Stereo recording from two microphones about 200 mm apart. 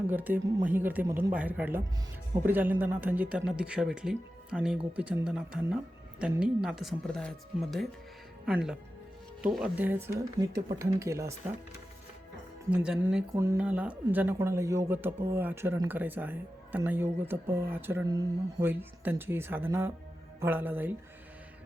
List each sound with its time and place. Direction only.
0.1 s speech: 10° right (ahead or behind)
12.7 s speech: 5° right (ahead or behind)